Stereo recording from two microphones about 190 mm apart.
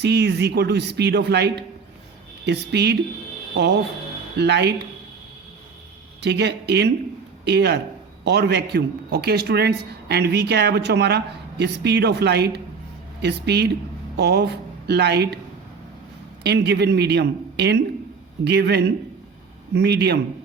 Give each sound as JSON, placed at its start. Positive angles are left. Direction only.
{"t": 0.0, "sound": "speech", "side_deg": -60}
{"t": 4.4, "sound": "speech", "side_deg": -65}
{"t": 6.2, "sound": "speech", "side_deg": -60}
{"t": 16.4, "sound": "speech", "side_deg": -60}